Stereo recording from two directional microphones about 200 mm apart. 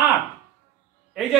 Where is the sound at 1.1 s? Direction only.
Centre (ahead or behind).